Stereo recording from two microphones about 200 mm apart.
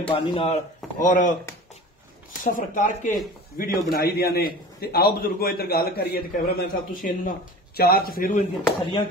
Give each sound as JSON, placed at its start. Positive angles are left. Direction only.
{"t": 0.0, "sound": "speech", "side_deg": 25}
{"t": 0.9, "sound": "speech", "side_deg": 40}
{"t": 2.4, "sound": "a man's voice", "side_deg": 40}